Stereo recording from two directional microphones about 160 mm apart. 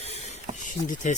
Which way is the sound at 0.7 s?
50° left (ahead or behind).